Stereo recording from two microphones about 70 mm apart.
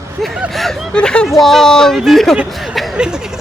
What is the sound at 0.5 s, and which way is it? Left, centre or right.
Speech, centre.